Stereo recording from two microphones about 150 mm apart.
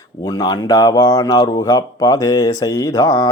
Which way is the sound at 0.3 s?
25° left (ahead or behind).